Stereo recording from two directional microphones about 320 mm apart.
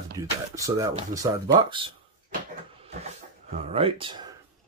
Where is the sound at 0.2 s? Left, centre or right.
Centre.